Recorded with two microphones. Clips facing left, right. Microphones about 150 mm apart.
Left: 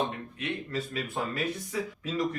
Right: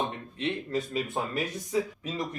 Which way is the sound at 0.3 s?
30° right (ahead or behind).